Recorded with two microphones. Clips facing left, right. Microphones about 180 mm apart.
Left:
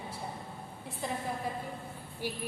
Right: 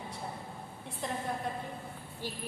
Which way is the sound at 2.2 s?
10° left (ahead or behind).